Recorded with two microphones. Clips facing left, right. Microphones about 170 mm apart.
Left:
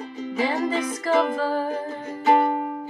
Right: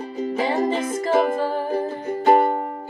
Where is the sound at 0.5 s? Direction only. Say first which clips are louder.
Right 3 dB; 45° right (ahead or behind).